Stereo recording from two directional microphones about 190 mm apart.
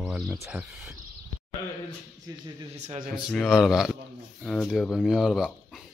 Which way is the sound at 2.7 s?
40° right (ahead or behind).